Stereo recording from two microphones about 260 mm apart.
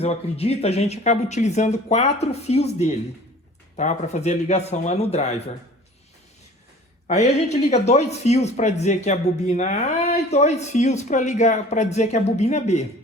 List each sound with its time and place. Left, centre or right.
0.0 s speech: left
7.1 s speech: left